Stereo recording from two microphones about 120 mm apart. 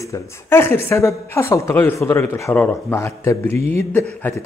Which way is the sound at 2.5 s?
10° left (ahead or behind).